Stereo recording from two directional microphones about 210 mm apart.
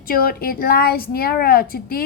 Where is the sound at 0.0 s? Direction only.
45° left (ahead or behind).